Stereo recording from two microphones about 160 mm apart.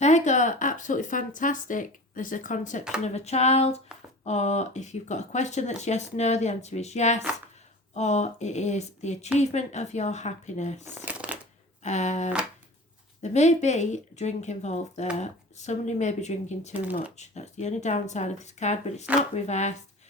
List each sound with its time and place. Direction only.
0.0 s speech: 50° left (ahead or behind)
11.0 s shuffling cards: 10° right (ahead or behind)
11.8 s speech: 45° left (ahead or behind)